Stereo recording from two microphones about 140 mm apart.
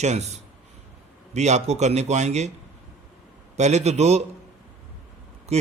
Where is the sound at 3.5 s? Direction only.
55° right (ahead or behind).